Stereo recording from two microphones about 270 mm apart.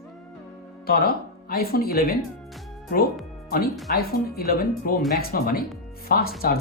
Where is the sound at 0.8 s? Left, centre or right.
Left.